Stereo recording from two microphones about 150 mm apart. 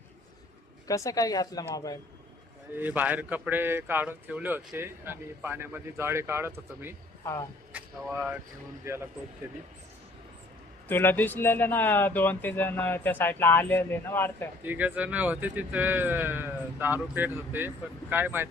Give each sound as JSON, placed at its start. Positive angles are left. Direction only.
{"t": 0.9, "sound": "speech", "side_deg": 20}
{"t": 2.7, "sound": "a man's voice", "side_deg": -10}
{"t": 8.9, "sound": "speech", "side_deg": -20}
{"t": 10.8, "sound": "speech", "side_deg": 15}
{"t": 14.6, "sound": "a man's voice", "side_deg": -10}